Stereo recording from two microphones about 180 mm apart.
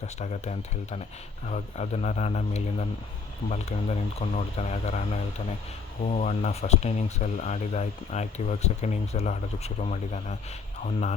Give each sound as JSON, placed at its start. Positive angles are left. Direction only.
{"t": 0.0, "sound": "speech", "side_deg": 40}